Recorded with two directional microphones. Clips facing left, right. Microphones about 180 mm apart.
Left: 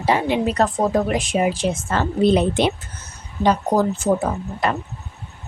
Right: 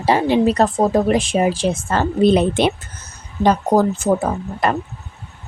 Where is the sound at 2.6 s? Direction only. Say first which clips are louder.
Right 2 dB; 60° right (ahead or behind).